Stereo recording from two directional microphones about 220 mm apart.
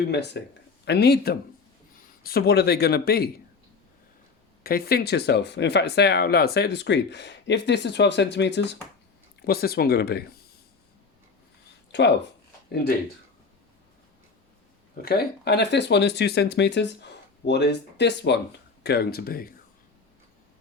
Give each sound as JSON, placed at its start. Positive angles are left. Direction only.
{"t": 0.1, "sound": "speech", "side_deg": 50}
{"t": 4.6, "sound": "speech", "side_deg": 45}
{"t": 11.9, "sound": "a sound", "side_deg": 50}
{"t": 15.0, "sound": "speech", "side_deg": 45}